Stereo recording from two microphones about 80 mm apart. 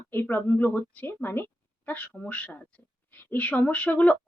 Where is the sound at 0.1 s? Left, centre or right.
Left.